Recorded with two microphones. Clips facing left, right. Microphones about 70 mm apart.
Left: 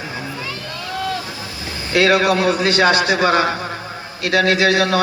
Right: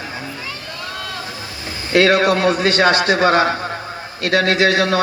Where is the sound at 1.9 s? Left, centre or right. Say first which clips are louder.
Right 1 dB; right.